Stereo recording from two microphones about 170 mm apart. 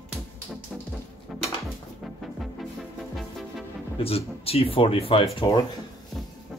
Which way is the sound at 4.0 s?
35° left (ahead or behind).